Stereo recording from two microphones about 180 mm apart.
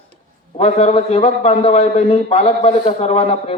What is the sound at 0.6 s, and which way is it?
Speech, 35° left (ahead or behind).